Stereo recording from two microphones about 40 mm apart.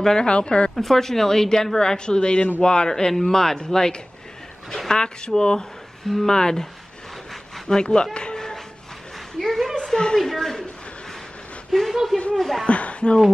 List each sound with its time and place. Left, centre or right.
0.0 s a woman's voice: centre
0.7 s a woman's voice: centre
6.0 s speech: centre
9.4 s a woman's voice: centre
11.7 s speech: centre
12.6 s speech: left